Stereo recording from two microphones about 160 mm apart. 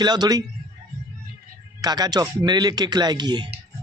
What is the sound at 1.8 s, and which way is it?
Speech, 25° right (ahead or behind).